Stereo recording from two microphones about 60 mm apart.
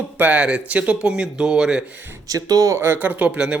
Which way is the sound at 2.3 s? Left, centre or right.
Right.